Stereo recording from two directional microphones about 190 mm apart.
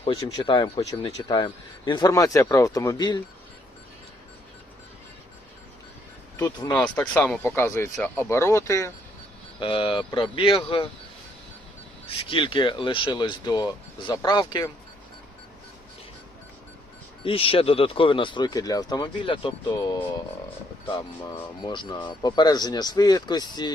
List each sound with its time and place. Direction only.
0.0 s speech: 25° left (ahead or behind)
6.4 s speech: 20° left (ahead or behind)
6.8 s speech: 10° left (ahead or behind)
9.6 s speech: 25° left (ahead or behind)
12.0 s speech: 30° left (ahead or behind)
17.2 s speech: 30° left (ahead or behind)
21.6 s speech: 25° left (ahead or behind)